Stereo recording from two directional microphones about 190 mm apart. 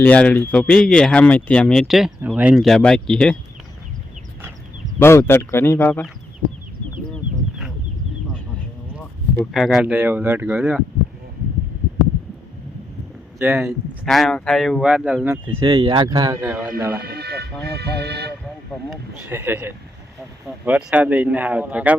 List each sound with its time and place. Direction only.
0.0 s speech: 10° left (ahead or behind)
4.9 s speech: 15° left (ahead or behind)
9.3 s speech: 5° left (ahead or behind)
13.4 s speech: 10° right (ahead or behind)
14.0 s speech: centre (ahead or behind)
15.6 s speech: 30° right (ahead or behind); by 17.0 s 5° right (ahead or behind)
17.0 s speech: 55° right (ahead or behind)
18.4 s speech: centre (ahead or behind)
19.2 s speech: 10° right (ahead or behind)